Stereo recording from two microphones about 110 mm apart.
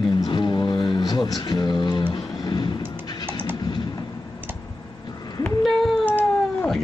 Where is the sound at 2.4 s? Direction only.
40° left (ahead or behind).